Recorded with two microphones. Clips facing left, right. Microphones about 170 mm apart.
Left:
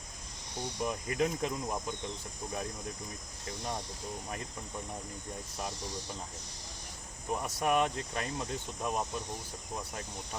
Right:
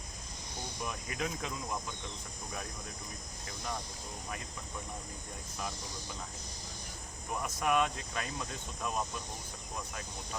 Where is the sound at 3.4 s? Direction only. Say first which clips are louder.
Left 3 dB; 30° left (ahead or behind).